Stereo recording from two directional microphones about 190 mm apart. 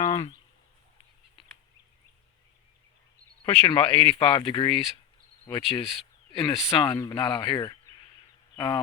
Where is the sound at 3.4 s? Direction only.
30° left (ahead or behind).